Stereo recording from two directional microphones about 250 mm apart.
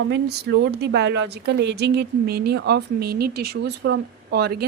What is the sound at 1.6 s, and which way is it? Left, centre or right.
Speech, right.